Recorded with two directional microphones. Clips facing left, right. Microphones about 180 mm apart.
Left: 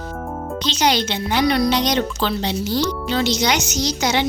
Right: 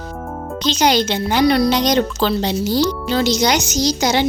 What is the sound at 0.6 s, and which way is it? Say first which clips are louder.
A woman's voice: right 4 dB; 45° right (ahead or behind).